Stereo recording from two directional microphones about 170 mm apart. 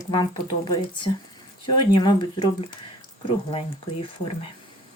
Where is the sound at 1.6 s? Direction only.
25° left (ahead or behind).